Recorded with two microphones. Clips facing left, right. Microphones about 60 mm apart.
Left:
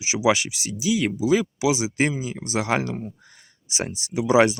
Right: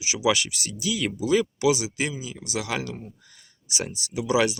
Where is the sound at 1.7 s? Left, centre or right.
Left.